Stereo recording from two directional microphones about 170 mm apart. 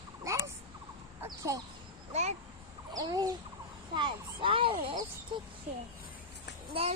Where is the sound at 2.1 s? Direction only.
40° right (ahead or behind).